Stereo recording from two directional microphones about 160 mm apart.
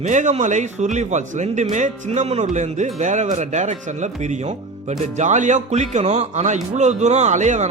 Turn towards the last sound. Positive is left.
turn(degrees=-50)  # may be behind; listen again after turning